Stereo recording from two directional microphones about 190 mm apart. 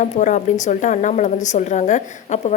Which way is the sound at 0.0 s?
40° left (ahead or behind).